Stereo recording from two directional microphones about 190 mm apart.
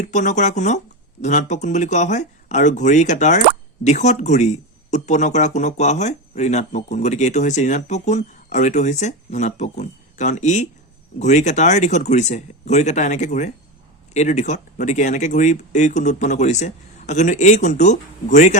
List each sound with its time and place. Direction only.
0.0 s speech: 40° left (ahead or behind)